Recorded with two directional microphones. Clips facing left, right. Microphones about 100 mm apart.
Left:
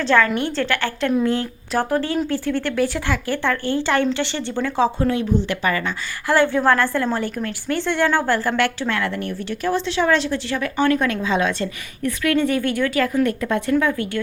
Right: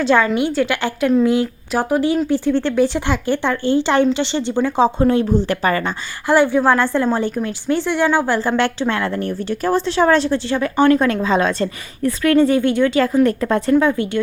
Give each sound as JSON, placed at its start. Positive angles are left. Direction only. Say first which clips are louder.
{"t": 0.0, "sound": "a woman's voice", "louder": "right 3 dB", "side_deg": -15}
{"t": 4.9, "sound": "speech", "louder": "right 5 dB", "side_deg": -30}
{"t": 6.2, "sound": "a woman's voice", "louder": "right 3 dB", "side_deg": -15}
{"t": 13.2, "sound": "a woman's voice", "louder": "right 4 dB", "side_deg": -35}